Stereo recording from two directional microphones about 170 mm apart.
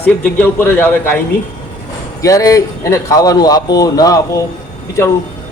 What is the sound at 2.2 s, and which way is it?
A man's voice, 20° left (ahead or behind).